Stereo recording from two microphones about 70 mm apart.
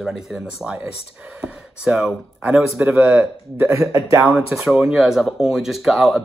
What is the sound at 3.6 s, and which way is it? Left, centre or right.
Speech, right.